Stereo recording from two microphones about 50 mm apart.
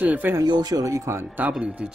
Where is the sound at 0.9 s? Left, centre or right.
Right.